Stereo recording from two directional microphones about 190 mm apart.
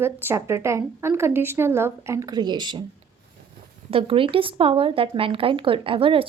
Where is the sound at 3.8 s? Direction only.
30° right (ahead or behind).